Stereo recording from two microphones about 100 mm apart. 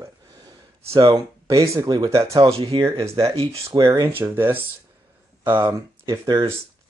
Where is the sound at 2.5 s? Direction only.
75° right (ahead or behind).